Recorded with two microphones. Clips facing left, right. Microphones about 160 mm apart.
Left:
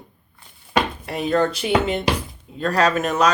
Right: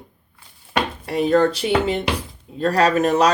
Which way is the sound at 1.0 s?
35° right (ahead or behind).